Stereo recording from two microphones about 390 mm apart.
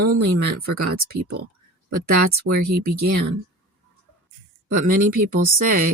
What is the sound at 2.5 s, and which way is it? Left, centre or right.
Speech, right.